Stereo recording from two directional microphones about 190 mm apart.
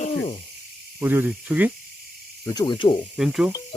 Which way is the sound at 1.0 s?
10° right (ahead or behind).